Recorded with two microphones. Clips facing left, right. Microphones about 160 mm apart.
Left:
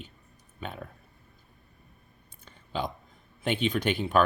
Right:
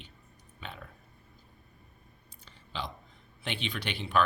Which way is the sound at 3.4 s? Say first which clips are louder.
Left 9 dB; 45° left (ahead or behind).